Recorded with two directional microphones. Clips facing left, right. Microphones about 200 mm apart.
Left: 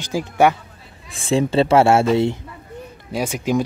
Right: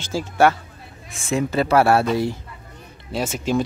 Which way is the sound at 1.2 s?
30° left (ahead or behind).